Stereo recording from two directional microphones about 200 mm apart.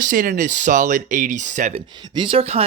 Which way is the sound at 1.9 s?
20° right (ahead or behind).